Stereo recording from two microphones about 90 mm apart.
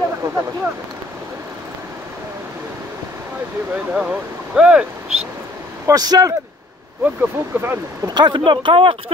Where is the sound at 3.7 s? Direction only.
10° right (ahead or behind).